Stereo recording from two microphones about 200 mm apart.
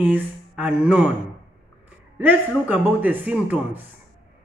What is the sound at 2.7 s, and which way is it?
A man's voice, 10° right (ahead or behind).